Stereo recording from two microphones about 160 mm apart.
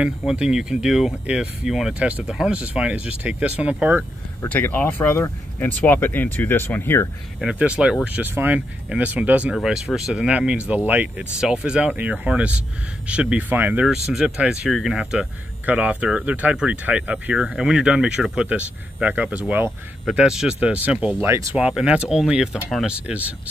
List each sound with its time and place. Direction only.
0.0 s speech: 5° right (ahead or behind)
4.4 s speech: 10° left (ahead or behind)
7.3 s speech: 5° right (ahead or behind)
21.3 s speech: 20° right (ahead or behind)
21.5 s speech: 5° right (ahead or behind)